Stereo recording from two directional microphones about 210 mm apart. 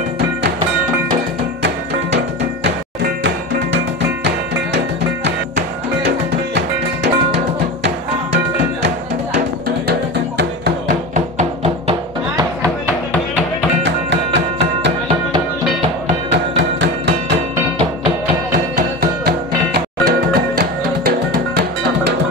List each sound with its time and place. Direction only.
3.3 s music: 55° right (ahead or behind)
6.0 s drum: 55° right (ahead or behind)
9.8 s music: 50° right (ahead or behind)
11.1 s music: 30° right (ahead or behind)
13.8 s music: 60° right (ahead or behind)
16.3 s music: 60° right (ahead or behind)
17.7 s music: 30° right (ahead or behind); by 22.1 s 50° right (ahead or behind)